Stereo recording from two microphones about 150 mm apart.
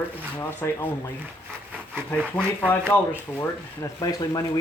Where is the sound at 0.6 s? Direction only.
15° left (ahead or behind).